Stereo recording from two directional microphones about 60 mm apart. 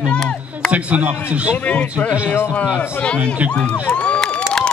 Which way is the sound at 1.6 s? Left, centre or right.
Left.